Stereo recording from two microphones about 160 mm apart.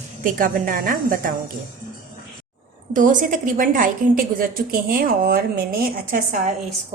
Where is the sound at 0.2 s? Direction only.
55° right (ahead or behind).